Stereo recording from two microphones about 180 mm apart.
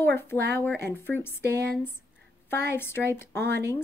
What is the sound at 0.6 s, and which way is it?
Speech, 10° left (ahead or behind).